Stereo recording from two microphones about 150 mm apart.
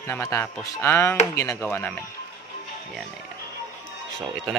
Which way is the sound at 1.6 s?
10° left (ahead or behind).